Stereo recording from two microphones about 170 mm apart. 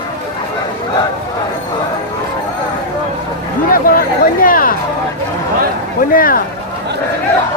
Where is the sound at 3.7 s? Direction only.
55° left (ahead or behind).